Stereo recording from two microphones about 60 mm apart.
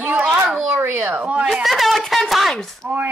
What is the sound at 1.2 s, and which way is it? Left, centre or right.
Speech, centre.